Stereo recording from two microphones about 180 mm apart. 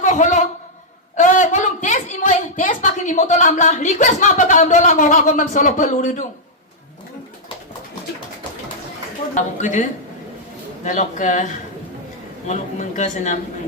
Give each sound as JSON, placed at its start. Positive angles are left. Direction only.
{"t": 0.0, "sound": "a man's voice", "side_deg": 45}
{"t": 1.1, "sound": "a sound", "side_deg": 45}
{"t": 2.6, "sound": "a woman's voice", "side_deg": 45}
{"t": 9.3, "sound": "a woman's voice", "side_deg": 45}
{"t": 10.8, "sound": "a woman's voice", "side_deg": 45}
{"t": 13.0, "sound": "speech", "side_deg": 40}